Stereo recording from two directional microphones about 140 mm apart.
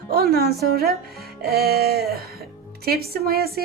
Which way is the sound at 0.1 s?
90° right.